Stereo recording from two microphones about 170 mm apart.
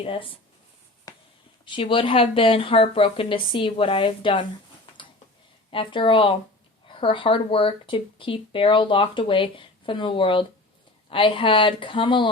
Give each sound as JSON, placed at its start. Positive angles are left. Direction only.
{"t": 0.0, "sound": "speech", "side_deg": 30}
{"t": 1.1, "sound": "a sound", "side_deg": 20}
{"t": 1.6, "sound": "speech", "side_deg": 30}
{"t": 5.7, "sound": "speech", "side_deg": 30}